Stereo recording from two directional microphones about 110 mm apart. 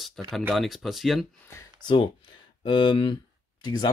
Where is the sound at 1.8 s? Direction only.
40° left (ahead or behind).